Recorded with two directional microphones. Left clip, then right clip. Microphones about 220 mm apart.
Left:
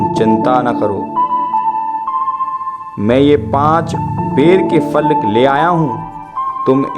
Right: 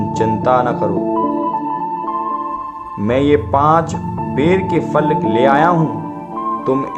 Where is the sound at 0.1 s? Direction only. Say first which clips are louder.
Right 2 dB; 30° left (ahead or behind).